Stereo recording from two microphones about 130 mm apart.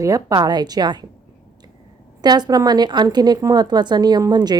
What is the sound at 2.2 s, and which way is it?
A woman's voice, 35° right (ahead or behind).